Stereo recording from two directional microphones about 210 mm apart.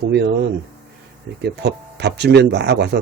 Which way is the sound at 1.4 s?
55° right (ahead or behind).